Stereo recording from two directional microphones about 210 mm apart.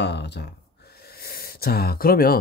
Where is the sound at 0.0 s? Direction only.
55° left (ahead or behind).